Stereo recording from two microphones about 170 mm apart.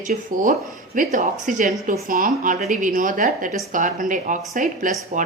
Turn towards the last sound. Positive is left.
turn(degrees=-50)  # may be behind; listen again after turning